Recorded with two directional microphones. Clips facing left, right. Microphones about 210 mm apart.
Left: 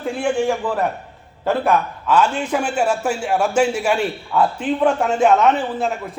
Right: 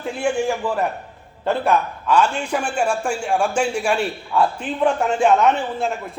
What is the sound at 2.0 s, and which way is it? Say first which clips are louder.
A man's voice: left 1 dB; 5° left (ahead or behind).